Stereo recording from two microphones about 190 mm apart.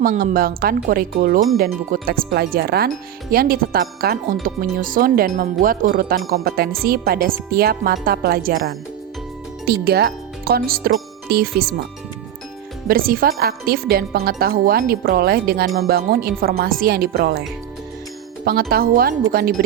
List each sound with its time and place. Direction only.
0.0 s speech: 45° right (ahead or behind)
9.6 s speech: 55° right (ahead or behind)
12.9 s speech: 50° right (ahead or behind)
18.7 s speech: 50° right (ahead or behind)